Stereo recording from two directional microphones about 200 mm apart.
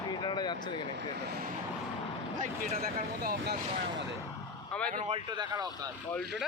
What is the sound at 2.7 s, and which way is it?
Speech, 50° right (ahead or behind).